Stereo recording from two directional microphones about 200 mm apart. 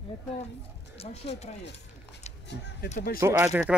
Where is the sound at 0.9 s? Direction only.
30° left (ahead or behind).